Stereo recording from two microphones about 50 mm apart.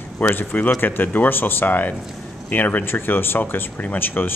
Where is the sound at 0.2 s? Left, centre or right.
Left.